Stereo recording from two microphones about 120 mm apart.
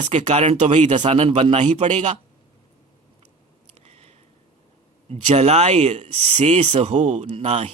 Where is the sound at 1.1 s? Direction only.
50° right (ahead or behind).